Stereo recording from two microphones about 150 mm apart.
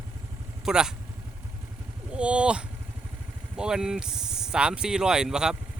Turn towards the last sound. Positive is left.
turn(degrees=-5)  # may be behind; listen again after turning